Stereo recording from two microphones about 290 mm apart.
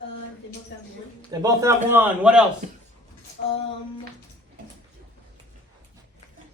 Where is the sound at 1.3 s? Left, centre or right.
Centre.